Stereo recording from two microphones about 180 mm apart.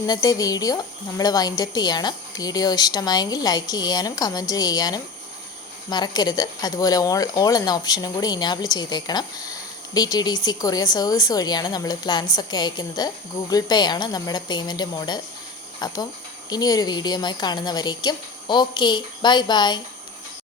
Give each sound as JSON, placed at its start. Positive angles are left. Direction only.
{"t": 0.0, "sound": "speech", "side_deg": 20}